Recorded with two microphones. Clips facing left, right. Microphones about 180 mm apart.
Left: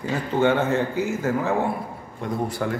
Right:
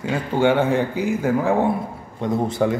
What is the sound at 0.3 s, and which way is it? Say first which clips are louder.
A man's voice: right 2 dB; 10° right (ahead or behind).